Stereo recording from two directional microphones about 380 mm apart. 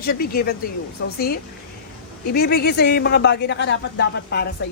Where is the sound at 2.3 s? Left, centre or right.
Left.